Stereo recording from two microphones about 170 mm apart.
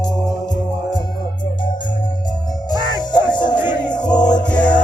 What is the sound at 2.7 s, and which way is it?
Music, 25° left (ahead or behind).